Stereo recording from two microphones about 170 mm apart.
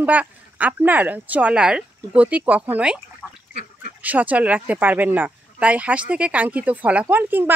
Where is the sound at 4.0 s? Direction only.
10° right (ahead or behind).